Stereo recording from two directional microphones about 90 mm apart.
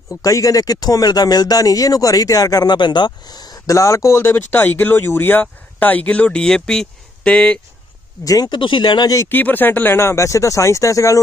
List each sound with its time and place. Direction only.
0.1 s speech: 35° left (ahead or behind)
3.7 s speech: 35° left (ahead or behind); by 7.6 s 10° left (ahead or behind)
8.2 s speech: 40° left (ahead or behind)
8.5 s speech: 70° left (ahead or behind)
9.3 s speech: 20° left (ahead or behind); by 11.1 s 35° left (ahead or behind)